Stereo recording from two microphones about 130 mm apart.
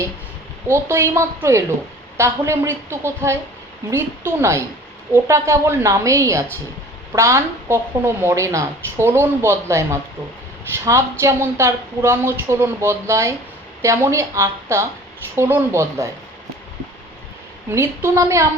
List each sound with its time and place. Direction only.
0.7 s speech: 20° right (ahead or behind)
17.7 s speech: 20° right (ahead or behind)